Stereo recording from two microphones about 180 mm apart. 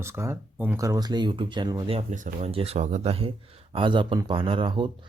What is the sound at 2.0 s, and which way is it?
Speech, 45° right (ahead or behind).